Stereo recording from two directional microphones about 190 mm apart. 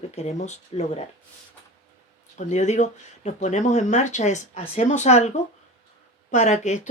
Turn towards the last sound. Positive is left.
turn(degrees=40)  # may be behind; listen again after turning